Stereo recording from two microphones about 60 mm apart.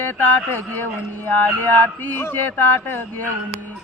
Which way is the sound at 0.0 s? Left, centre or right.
Left.